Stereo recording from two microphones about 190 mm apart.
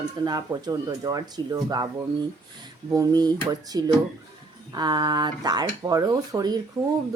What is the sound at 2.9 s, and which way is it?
Speech, 20° right (ahead or behind).